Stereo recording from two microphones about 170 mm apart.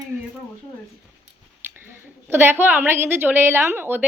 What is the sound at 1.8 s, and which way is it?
A woman's voice, 15° right (ahead or behind).